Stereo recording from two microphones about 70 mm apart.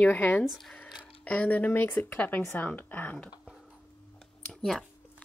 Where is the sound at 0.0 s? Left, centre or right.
Left.